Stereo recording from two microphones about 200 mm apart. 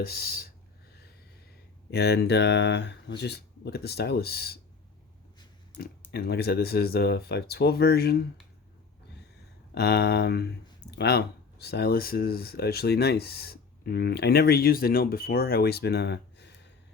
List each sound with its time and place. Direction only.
0.0 s speech: 50° left (ahead or behind)
1.9 s speech: 55° left (ahead or behind)
6.1 s speech: 50° left (ahead or behind)
9.7 s a sound: 55° left (ahead or behind)
10.9 s speech: 55° left (ahead or behind)